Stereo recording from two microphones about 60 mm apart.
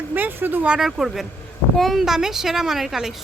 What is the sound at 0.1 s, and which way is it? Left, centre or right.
Speech, right.